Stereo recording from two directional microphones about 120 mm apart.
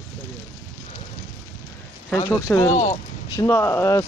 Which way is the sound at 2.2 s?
25° left (ahead or behind).